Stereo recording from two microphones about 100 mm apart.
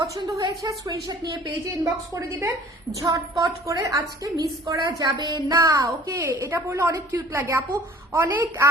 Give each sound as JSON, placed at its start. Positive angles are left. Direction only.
{"t": 0.3, "sound": "a woman's voice", "side_deg": -35}
{"t": 2.3, "sound": "a woman's voice", "side_deg": -20}
{"t": 3.0, "sound": "a woman's voice", "side_deg": -35}